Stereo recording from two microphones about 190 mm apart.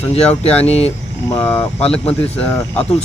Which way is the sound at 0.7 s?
35° left (ahead or behind).